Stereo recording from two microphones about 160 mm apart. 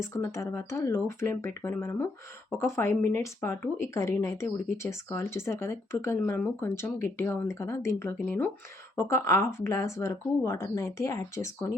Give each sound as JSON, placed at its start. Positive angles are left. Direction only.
{"t": 0.0, "sound": "speech", "side_deg": 15}